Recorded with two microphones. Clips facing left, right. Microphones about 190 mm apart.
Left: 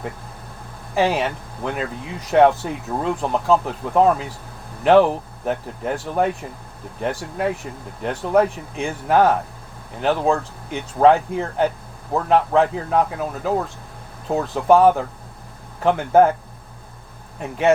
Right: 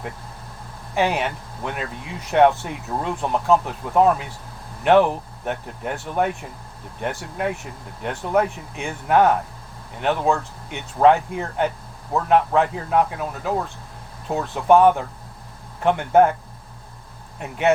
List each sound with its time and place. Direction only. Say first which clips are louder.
0.9 s speech: left 2 dB; 35° left (ahead or behind)
17.4 s speech: left 2 dB; 35° left (ahead or behind)